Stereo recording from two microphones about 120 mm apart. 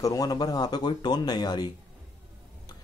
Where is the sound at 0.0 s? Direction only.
30° left (ahead or behind).